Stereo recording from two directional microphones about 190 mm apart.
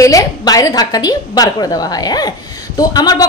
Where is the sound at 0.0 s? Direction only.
20° left (ahead or behind).